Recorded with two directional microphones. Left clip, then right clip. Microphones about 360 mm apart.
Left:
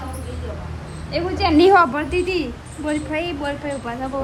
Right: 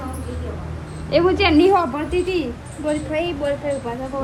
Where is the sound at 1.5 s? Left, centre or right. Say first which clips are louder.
Left 5 dB; left.